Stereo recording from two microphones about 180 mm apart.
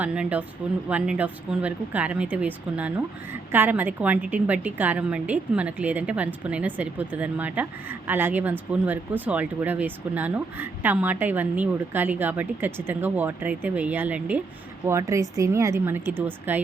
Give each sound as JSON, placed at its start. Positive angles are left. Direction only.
{"t": 0.0, "sound": "a woman's voice", "side_deg": -5}